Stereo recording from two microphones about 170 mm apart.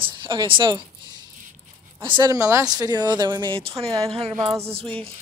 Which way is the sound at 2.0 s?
30° right (ahead or behind).